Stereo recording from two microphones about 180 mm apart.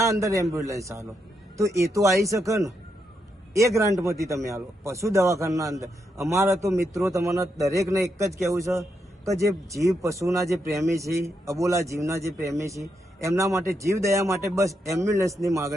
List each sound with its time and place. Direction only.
0.0 s a man's voice: 15° right (ahead or behind)